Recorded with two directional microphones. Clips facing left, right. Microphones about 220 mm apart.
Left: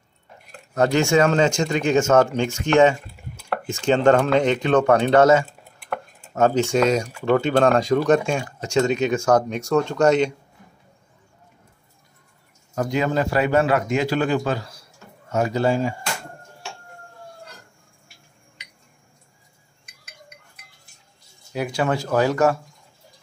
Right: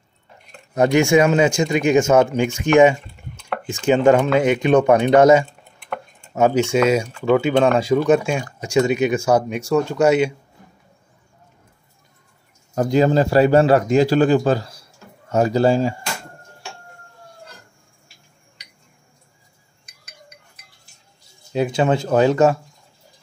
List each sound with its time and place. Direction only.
0.7 s speech: 15° right (ahead or behind)
3.0 s chopping: 5° left (ahead or behind)
3.8 s speech: 10° right (ahead or behind)
5.4 s a sound: 5° left (ahead or behind)
6.3 s speech: 10° right (ahead or behind)
12.7 s a man's voice: 35° right (ahead or behind)
19.9 s chink: 40° right (ahead or behind)
21.5 s speech: 25° right (ahead or behind)